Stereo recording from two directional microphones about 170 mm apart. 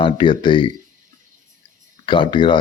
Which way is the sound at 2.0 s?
30° left (ahead or behind).